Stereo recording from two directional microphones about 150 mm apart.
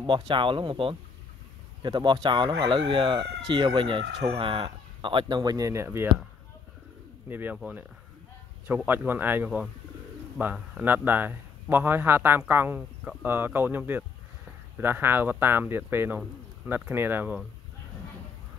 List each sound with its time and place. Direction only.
0.0 s speech: 35° right (ahead or behind); by 6.0 s 15° right (ahead or behind)
7.2 s speech: 15° right (ahead or behind)
8.6 s speech: 15° right (ahead or behind)